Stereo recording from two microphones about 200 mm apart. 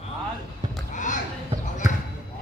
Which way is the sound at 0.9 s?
40° left (ahead or behind).